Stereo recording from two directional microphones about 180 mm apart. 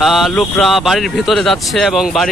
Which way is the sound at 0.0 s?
Centre (ahead or behind).